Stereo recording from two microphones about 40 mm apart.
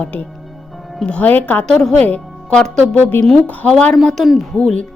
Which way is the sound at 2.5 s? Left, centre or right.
Centre.